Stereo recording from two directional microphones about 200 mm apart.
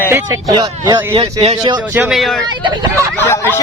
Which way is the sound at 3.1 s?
10° left (ahead or behind).